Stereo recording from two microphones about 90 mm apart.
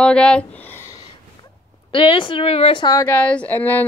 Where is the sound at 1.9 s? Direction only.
70° left (ahead or behind); by 2.8 s 90° left.